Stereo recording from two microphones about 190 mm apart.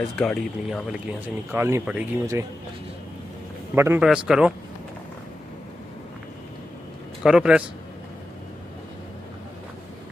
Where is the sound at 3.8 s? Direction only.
15° right (ahead or behind).